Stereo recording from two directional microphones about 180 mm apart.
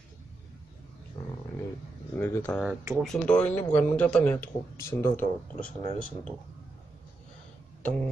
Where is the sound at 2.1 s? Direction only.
10° left (ahead or behind).